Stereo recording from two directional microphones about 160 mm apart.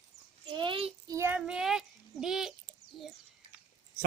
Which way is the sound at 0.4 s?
30° right (ahead or behind).